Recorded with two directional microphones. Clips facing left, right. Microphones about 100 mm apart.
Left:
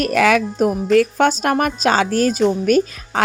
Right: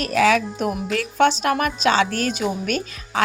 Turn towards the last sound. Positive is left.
turn(degrees=40)  # may be behind; listen again after turning